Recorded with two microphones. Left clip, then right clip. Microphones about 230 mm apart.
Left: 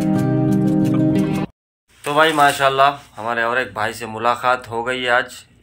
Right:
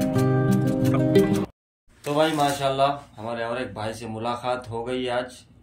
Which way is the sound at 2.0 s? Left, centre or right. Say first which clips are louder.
Left 8 dB; left.